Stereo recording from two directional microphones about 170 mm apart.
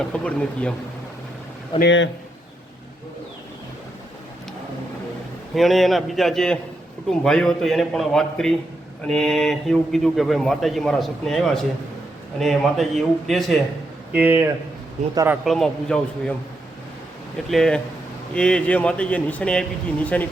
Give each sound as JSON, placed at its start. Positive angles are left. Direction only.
{"t": 0.1, "sound": "speech", "side_deg": 5}
{"t": 1.8, "sound": "speech", "side_deg": 90}
{"t": 5.5, "sound": "a man's voice", "side_deg": 0}
{"t": 15.4, "sound": "a man's voice", "side_deg": 5}
{"t": 17.5, "sound": "a man's voice", "side_deg": 5}